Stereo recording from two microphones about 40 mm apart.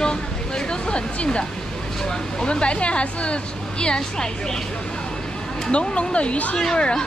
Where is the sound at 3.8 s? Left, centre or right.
Centre.